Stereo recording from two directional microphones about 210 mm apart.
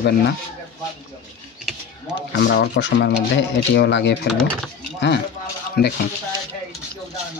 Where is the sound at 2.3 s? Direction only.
50° left (ahead or behind).